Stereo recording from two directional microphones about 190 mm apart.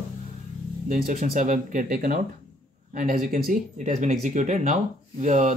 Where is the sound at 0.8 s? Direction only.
45° right (ahead or behind).